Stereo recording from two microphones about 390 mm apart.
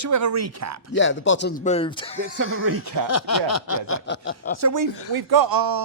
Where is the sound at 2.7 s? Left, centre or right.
Right.